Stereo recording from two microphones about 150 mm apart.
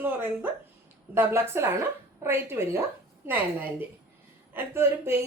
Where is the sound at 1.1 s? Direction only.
15° right (ahead or behind).